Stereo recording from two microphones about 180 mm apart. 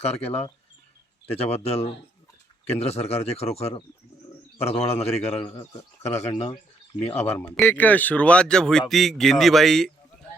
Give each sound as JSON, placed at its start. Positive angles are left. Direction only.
{"t": 0.0, "sound": "speech", "side_deg": 35}
{"t": 7.3, "sound": "speech", "side_deg": 15}